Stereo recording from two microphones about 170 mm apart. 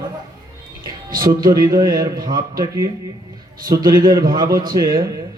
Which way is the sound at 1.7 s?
25° right (ahead or behind).